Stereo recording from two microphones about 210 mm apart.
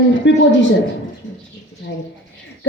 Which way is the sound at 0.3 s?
60° left (ahead or behind).